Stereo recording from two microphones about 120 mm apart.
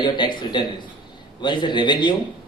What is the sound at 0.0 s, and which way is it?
A man's voice, 40° left (ahead or behind).